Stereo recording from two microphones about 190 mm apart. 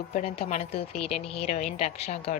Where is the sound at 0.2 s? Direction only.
35° left (ahead or behind).